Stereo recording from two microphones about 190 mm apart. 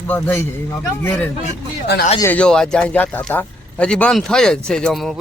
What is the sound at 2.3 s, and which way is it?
Speech, 5° left (ahead or behind).